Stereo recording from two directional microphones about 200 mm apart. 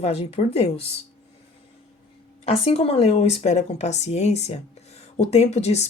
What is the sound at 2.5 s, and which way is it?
A woman's voice, 30° left (ahead or behind).